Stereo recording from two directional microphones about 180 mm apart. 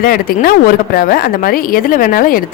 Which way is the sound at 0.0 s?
55° left (ahead or behind).